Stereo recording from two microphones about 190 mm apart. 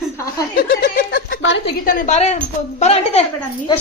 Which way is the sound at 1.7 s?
50° left (ahead or behind).